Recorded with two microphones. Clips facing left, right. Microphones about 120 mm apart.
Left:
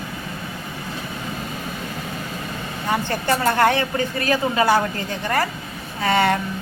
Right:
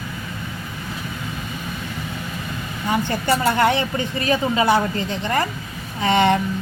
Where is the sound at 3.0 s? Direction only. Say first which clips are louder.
Even; 15° right (ahead or behind).